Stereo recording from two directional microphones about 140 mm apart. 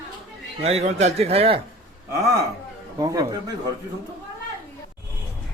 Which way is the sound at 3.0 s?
25° right (ahead or behind).